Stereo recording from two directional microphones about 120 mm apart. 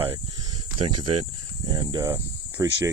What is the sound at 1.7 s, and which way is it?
Speech, 30° right (ahead or behind).